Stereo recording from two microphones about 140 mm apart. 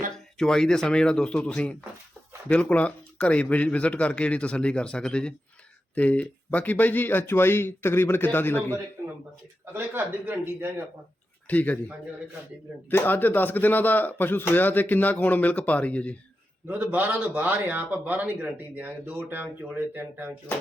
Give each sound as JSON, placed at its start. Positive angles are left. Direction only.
{"t": 0.3, "sound": "a man's voice", "side_deg": 5}
{"t": 9.7, "sound": "a man's voice", "side_deg": -15}
{"t": 11.4, "sound": "a man's voice", "side_deg": 10}
{"t": 12.9, "sound": "a man's voice", "side_deg": 15}
{"t": 16.6, "sound": "a man's voice", "side_deg": -10}